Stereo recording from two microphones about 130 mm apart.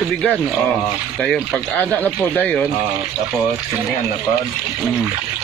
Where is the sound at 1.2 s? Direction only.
5° left (ahead or behind).